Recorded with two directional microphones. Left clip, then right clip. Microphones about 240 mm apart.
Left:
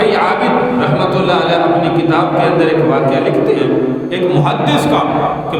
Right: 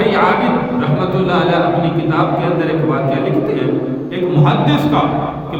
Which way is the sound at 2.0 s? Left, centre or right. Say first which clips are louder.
Left 3 dB; centre.